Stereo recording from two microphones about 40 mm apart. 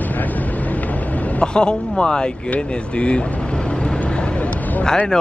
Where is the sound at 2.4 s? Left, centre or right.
Left.